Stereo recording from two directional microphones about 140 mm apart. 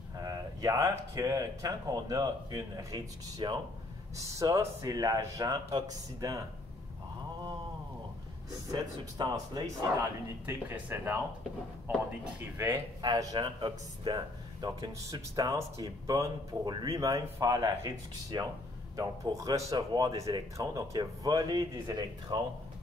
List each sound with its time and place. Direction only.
0.2 s speech: 25° right (ahead or behind)
8.7 s speech: 30° right (ahead or behind)
10.4 s speech: 15° right (ahead or behind)
12.5 s speech: 20° right (ahead or behind)
13.0 s speech: 30° right (ahead or behind)